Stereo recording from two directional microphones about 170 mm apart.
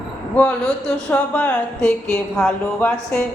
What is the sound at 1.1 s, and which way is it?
A woman's voice, 10° left (ahead or behind).